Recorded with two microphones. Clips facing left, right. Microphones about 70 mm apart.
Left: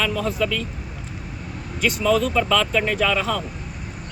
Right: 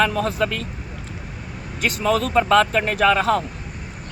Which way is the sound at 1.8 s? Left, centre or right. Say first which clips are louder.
Left 1 dB; right.